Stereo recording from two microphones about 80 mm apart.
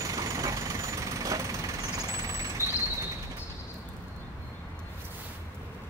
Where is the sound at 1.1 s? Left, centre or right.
Right.